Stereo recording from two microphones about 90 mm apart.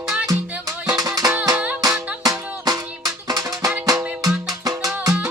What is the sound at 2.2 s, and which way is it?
Music, 45° right (ahead or behind).